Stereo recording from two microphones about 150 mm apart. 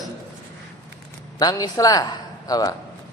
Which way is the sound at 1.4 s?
25° left (ahead or behind).